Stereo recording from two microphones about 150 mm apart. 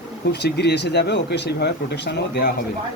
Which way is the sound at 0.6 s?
90° left.